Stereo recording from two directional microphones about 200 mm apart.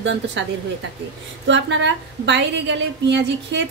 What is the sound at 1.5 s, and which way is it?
A woman's voice, 65° right (ahead or behind).